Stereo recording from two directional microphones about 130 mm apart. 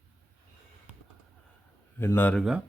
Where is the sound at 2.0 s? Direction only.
15° left (ahead or behind).